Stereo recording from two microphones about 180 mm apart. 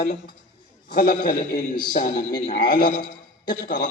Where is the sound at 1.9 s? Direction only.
50° left (ahead or behind).